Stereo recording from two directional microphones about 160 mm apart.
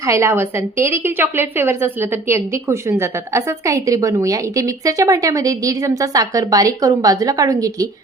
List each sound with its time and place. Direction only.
0.0 s a woman's voice: 15° right (ahead or behind)